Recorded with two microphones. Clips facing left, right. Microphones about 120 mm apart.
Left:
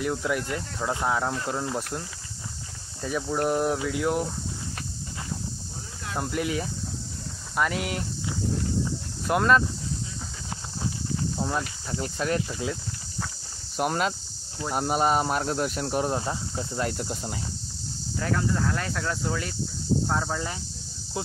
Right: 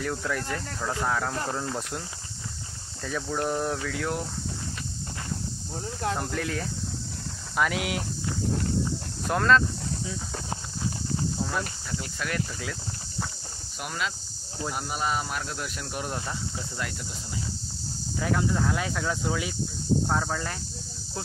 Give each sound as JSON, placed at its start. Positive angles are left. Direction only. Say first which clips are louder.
{"t": 0.0, "sound": "speech", "louder": "left 3 dB", "side_deg": 10}
{"t": 3.0, "sound": "speech", "louder": "left 3 dB", "side_deg": 10}
{"t": 6.1, "sound": "speech", "louder": "left 2 dB", "side_deg": 10}
{"t": 9.3, "sound": "speech", "louder": "left 1 dB", "side_deg": 10}
{"t": 11.9, "sound": "speech", "louder": "left 7 dB", "side_deg": 30}
{"t": 13.7, "sound": "cricket", "louder": "left 7 dB", "side_deg": 45}
{"t": 14.7, "sound": "speech", "louder": "left 7 dB", "side_deg": 45}
{"t": 16.9, "sound": "cricket", "louder": "left 6 dB", "side_deg": 50}
{"t": 18.2, "sound": "speech", "louder": "even", "side_deg": -5}